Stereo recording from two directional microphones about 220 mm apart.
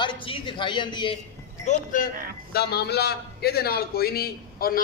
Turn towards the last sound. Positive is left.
turn(degrees=40)  # may be behind; listen again after turning